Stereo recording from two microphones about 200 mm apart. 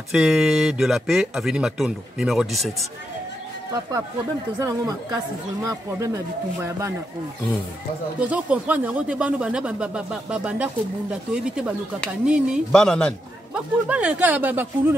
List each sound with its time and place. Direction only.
0.1 s speech: centre (ahead or behind)
4.6 s speech: 15° right (ahead or behind)
8.2 s speech: 5° right (ahead or behind)